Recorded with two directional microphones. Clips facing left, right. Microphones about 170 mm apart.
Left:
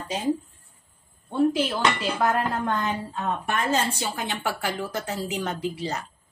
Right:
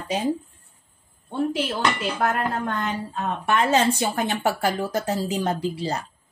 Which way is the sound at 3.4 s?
65° right (ahead or behind).